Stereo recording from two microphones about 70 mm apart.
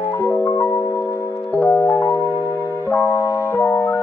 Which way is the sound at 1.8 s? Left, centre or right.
Left.